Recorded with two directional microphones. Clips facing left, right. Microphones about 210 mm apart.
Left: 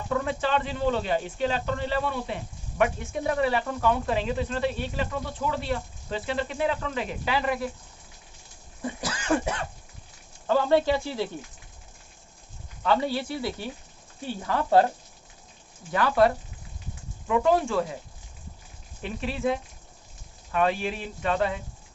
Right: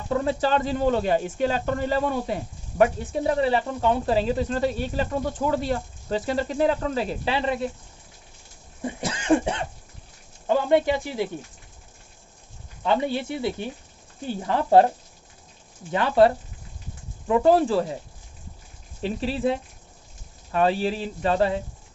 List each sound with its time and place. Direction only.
0.1 s speech: 30° right (ahead or behind)
8.8 s speech: 25° right (ahead or behind)
12.8 s speech: 20° right (ahead or behind)
15.9 s speech: 25° right (ahead or behind)
19.0 s speech: 30° right (ahead or behind)